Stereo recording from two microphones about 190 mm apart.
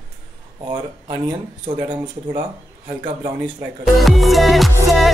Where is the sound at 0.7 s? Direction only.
20° right (ahead or behind).